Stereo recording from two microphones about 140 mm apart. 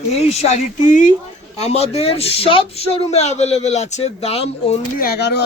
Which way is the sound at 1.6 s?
50° left (ahead or behind).